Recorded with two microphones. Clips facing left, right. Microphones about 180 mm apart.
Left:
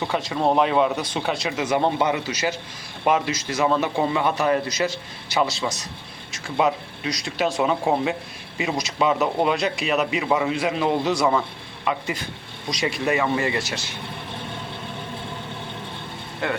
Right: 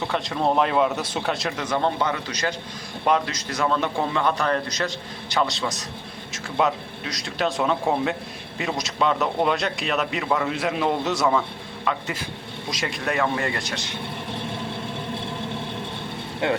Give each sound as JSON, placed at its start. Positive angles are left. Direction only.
{"t": 0.1, "sound": "a man's voice", "side_deg": 0}
{"t": 1.7, "sound": "a man's voice", "side_deg": 15}